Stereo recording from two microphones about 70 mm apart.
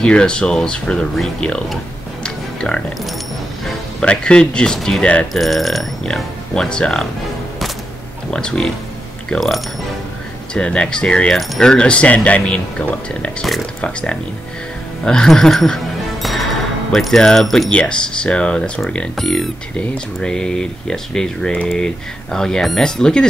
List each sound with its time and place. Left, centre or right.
0.0 s speech: centre
2.2 s music: centre
4.0 s speech: centre
4.7 s speech: centre
6.5 s speech: centre
8.3 s speech: centre
10.5 s speech: centre
11.3 s speech: centre
11.7 s speech: centre
17.7 s speech: centre